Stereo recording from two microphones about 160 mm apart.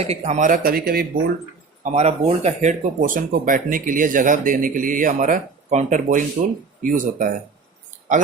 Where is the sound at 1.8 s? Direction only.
45° right (ahead or behind).